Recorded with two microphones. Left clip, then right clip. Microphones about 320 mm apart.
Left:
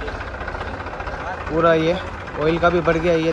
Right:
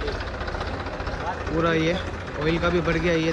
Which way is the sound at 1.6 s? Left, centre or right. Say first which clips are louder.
Left 7 dB; centre.